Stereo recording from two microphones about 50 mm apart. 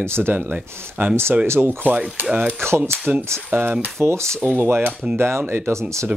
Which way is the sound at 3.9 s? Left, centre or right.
Right.